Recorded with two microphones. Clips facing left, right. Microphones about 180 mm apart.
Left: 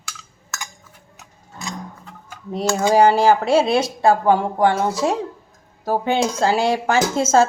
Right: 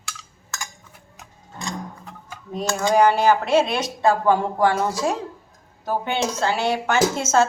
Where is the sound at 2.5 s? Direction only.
30° left (ahead or behind).